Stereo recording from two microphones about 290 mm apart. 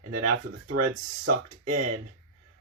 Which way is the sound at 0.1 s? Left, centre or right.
Right.